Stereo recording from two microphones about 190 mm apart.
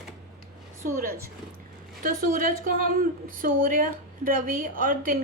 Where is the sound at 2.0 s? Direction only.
50° right (ahead or behind).